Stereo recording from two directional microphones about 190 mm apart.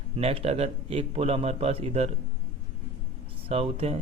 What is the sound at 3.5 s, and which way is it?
Speech, 30° right (ahead or behind).